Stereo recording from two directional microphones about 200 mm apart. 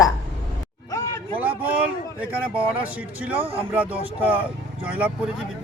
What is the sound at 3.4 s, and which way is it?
Speech, 30° right (ahead or behind).